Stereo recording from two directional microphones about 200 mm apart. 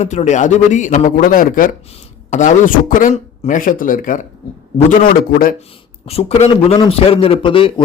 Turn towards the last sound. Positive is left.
turn(degrees=25)  # may be behind; listen again after turning